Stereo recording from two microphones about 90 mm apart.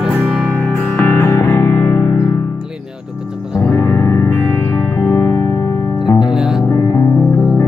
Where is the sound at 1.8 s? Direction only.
15° left (ahead or behind).